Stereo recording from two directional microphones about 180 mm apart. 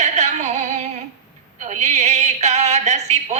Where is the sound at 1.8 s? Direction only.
40° right (ahead or behind).